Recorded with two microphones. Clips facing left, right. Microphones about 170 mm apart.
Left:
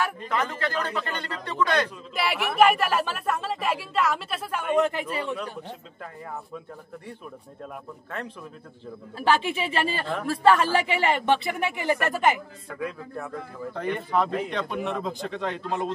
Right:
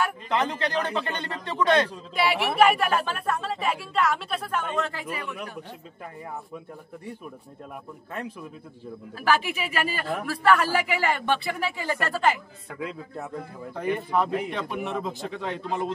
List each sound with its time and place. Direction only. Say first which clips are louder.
0.3 s speech: right 2 dB; 20° right (ahead or behind)
2.1 s speech: even; centre (ahead or behind); by 5.0 s 15° left (ahead or behind)
5.1 s speech: left 4 dB; 30° left (ahead or behind)
9.2 s speech: left 1 dB; 25° left (ahead or behind)
12.6 s speech: left 1 dB; 25° right (ahead or behind)
13.7 s speech: even; 10° right (ahead or behind)